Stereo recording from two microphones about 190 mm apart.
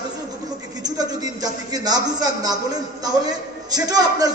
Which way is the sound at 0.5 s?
20° right (ahead or behind).